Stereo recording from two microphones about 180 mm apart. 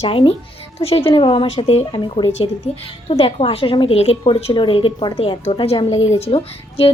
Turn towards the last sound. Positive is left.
turn(degrees=30)  # may be behind; listen again after turning